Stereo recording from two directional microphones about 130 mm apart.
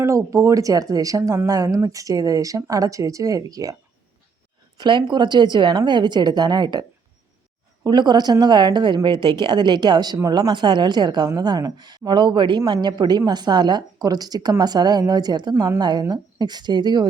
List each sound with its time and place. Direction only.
0.0 s speech: 25° right (ahead or behind)
4.8 s speech: 35° right (ahead or behind)
7.9 s speech: 35° right (ahead or behind)